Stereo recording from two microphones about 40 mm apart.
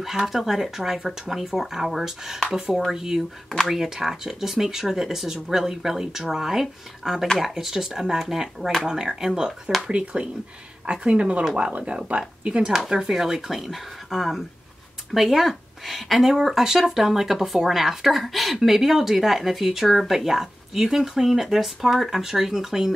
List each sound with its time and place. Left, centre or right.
0.0 s speech: centre
9.8 s speech: right; by 22.9 s centre